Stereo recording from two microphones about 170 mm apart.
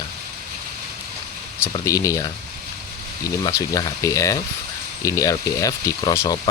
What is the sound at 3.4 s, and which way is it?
Speech, 20° left (ahead or behind).